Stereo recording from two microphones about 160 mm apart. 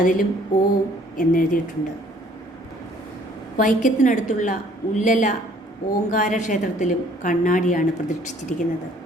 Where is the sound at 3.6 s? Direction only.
55° left (ahead or behind).